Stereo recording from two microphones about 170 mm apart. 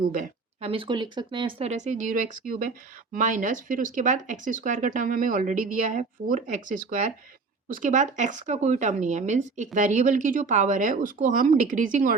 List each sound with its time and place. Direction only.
0.0 s speech: 55° right (ahead or behind)
0.6 s speech: 30° right (ahead or behind); by 12.1 s 50° right (ahead or behind)